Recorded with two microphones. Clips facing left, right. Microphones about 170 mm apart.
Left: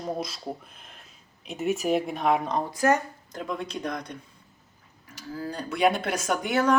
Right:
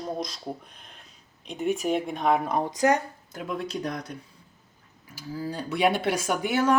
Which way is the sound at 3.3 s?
5° right (ahead or behind).